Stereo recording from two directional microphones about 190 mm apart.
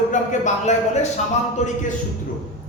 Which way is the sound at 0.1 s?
40° left (ahead or behind).